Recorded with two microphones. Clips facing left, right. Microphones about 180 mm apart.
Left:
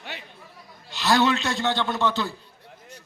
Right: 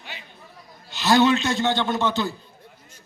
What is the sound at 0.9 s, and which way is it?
A man's voice, centre (ahead or behind).